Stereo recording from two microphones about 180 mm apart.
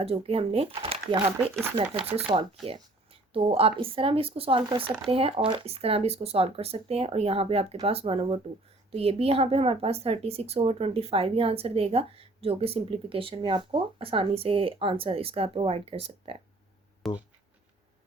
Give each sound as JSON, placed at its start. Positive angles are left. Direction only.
{"t": 0.0, "sound": "speech", "side_deg": -35}
{"t": 17.0, "sound": "speech", "side_deg": 0}